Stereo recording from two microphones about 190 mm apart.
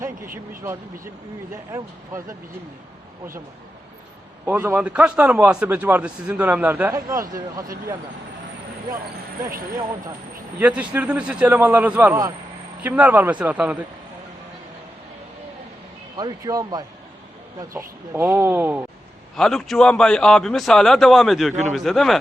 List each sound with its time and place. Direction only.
0.6 s a man's voice: 15° right (ahead or behind)
4.4 s a man's voice: 10° right (ahead or behind)
10.6 s a man's voice: 5° right (ahead or behind)
16.1 s a man's voice: 20° right (ahead or behind)
19.4 s a man's voice: centre (ahead or behind)